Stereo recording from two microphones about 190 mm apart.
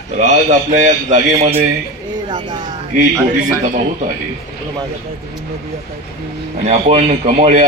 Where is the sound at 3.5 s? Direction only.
45° right (ahead or behind).